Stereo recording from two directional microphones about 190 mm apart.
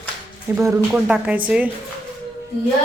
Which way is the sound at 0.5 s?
15° right (ahead or behind).